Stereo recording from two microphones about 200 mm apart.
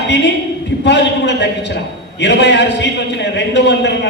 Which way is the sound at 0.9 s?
60° left (ahead or behind).